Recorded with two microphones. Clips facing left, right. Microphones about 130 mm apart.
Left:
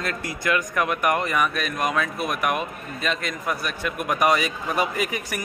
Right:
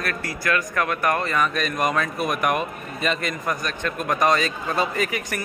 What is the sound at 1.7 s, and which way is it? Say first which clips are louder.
A man's voice: right 1 dB; centre (ahead or behind).